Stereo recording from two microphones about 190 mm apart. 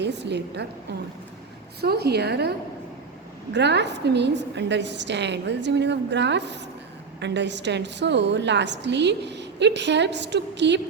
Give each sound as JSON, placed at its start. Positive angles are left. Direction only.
{"t": 0.0, "sound": "a woman's voice", "side_deg": -65}
{"t": 1.8, "sound": "a woman's voice", "side_deg": -55}